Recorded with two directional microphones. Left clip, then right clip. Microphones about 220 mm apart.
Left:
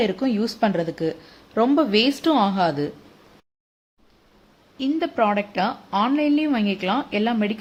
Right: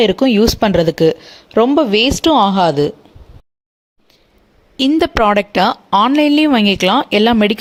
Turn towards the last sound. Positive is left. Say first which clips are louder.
# right 11 dB
turn(degrees=-50)  # may be behind; listen again after turning